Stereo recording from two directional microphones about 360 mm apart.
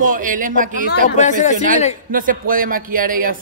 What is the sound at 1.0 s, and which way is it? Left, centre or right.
Speech, left.